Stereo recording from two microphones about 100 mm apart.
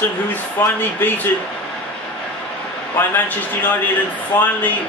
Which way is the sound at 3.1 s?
15° left (ahead or behind).